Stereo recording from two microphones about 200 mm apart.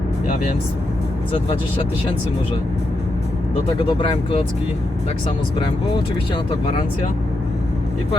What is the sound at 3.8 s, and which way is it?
Speech, 25° left (ahead or behind).